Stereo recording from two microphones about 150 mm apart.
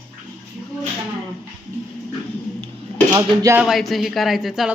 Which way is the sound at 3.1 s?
20° right (ahead or behind).